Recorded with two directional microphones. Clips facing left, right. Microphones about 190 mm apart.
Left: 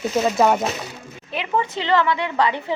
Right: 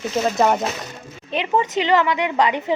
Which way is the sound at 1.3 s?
20° right (ahead or behind).